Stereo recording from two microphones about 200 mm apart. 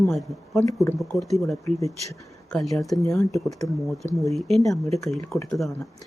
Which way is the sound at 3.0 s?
15° left (ahead or behind).